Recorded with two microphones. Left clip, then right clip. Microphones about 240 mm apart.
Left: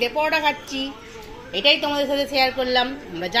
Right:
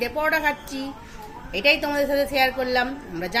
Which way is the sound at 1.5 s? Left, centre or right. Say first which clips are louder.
Left 2 dB; right.